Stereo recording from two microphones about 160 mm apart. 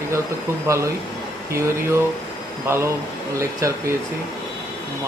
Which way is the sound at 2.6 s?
15° right (ahead or behind).